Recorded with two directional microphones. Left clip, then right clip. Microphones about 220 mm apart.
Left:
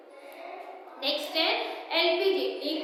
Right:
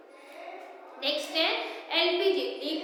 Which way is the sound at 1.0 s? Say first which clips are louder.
Even; centre (ahead or behind).